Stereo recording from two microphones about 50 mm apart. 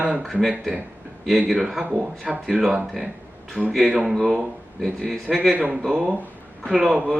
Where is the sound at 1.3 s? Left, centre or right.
Centre.